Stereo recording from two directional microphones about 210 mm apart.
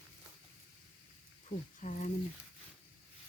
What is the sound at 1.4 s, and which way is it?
Speech, 35° left (ahead or behind).